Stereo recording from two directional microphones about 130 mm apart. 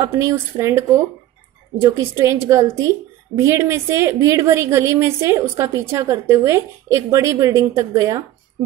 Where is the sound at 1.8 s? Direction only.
20° right (ahead or behind).